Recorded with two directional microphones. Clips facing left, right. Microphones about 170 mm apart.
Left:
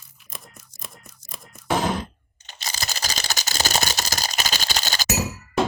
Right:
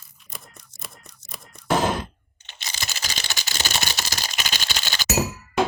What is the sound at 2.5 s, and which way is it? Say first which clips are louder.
Camera: left 3 dB; 40° left (ahead or behind).